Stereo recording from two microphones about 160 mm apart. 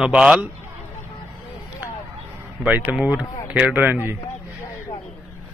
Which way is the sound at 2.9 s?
10° right (ahead or behind).